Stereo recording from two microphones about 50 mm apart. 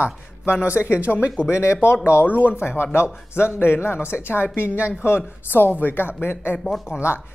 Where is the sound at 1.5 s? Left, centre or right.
Left.